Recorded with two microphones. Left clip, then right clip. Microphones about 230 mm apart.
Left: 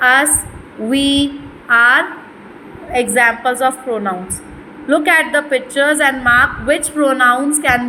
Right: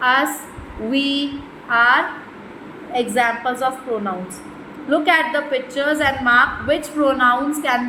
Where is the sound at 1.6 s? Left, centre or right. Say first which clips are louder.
Left 4 dB; left.